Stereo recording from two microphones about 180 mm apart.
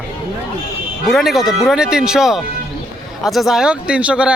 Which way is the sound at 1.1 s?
Centre (ahead or behind).